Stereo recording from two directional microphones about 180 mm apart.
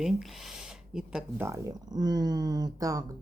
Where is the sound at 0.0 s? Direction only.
Centre (ahead or behind).